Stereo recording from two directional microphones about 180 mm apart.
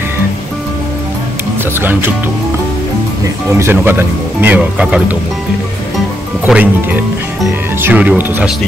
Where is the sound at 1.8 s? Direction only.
10° right (ahead or behind).